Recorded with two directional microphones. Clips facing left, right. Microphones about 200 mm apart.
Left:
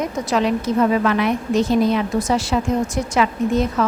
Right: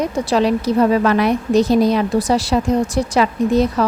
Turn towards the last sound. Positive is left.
turn(degrees=-35)  # may be behind; listen again after turning